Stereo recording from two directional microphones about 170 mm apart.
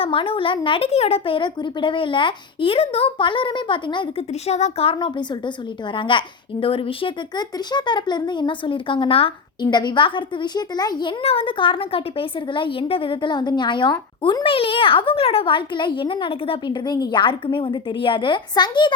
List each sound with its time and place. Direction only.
0.0 s a woman's voice: 30° left (ahead or behind)
4.5 s a woman's voice: 40° left (ahead or behind)